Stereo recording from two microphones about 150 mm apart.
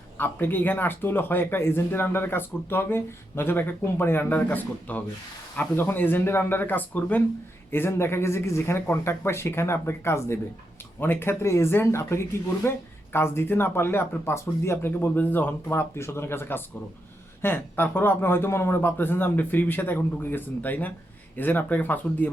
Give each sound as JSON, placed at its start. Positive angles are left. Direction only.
{"t": 0.2, "sound": "speech", "side_deg": 10}